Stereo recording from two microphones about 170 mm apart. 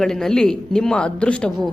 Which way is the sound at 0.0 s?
5° left (ahead or behind).